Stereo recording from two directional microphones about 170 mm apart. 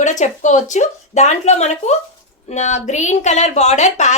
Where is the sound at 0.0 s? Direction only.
45° left (ahead or behind).